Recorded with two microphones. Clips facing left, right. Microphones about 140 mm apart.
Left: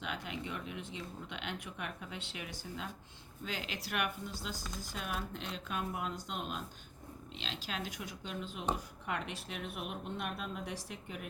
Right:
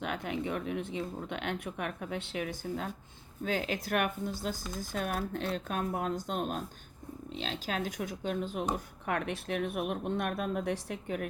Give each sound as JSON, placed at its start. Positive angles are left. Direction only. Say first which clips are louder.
{"t": 0.0, "sound": "speech", "louder": "right 7 dB", "side_deg": -50}